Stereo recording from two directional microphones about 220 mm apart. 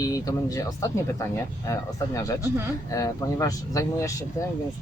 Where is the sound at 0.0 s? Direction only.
15° left (ahead or behind).